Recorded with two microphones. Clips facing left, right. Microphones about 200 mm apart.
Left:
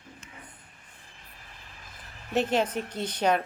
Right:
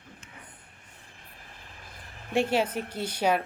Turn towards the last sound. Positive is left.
turn(degrees=-10)  # may be behind; listen again after turning